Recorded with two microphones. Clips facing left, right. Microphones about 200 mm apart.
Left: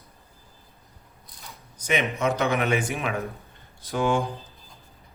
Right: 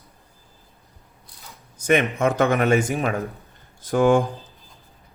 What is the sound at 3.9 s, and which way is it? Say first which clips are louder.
Speech: right 7 dB; 50° right (ahead or behind).